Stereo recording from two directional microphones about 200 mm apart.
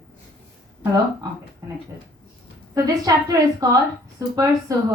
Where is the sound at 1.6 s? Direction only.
15° right (ahead or behind).